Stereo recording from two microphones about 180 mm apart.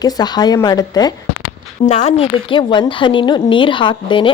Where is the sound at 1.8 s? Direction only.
40° left (ahead or behind).